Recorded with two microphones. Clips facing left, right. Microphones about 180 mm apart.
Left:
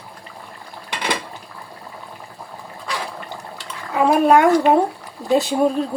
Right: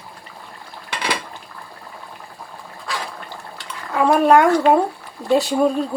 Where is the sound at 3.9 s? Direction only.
5° left (ahead or behind).